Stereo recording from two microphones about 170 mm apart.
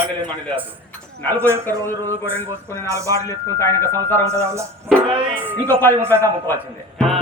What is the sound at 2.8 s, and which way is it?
Speech, 20° right (ahead or behind).